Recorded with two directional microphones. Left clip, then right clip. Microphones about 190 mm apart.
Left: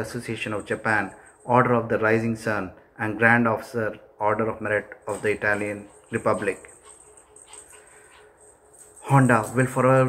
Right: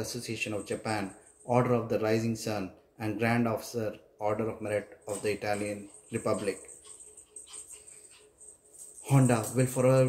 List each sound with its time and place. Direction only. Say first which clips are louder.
0.0 s speech: left 5 dB; 35° right (ahead or behind)
9.0 s speech: left 9 dB; 35° right (ahead or behind)